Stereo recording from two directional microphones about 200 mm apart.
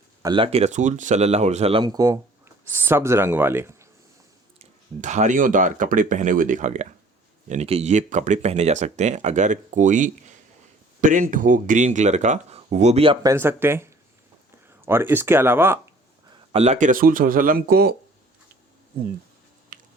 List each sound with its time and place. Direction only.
0.2 s speech: 20° right (ahead or behind)
4.9 s speech: 35° right (ahead or behind)
13.2 s speech: 10° right (ahead or behind)
16.5 s speech: 30° right (ahead or behind); by 17.9 s 50° right (ahead or behind)